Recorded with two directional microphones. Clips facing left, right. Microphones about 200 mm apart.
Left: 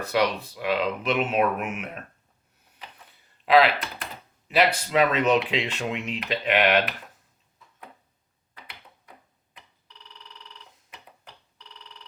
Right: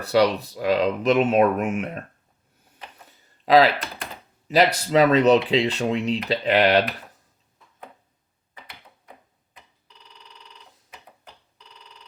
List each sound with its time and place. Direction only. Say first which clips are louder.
0.0 s speech: right 5 dB; 35° right (ahead or behind)
3.4 s speech: right 3 dB; 40° right (ahead or behind)